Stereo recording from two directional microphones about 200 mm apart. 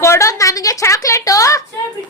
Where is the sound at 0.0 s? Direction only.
15° left (ahead or behind).